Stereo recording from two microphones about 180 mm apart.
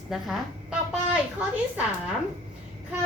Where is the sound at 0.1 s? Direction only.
Centre (ahead or behind).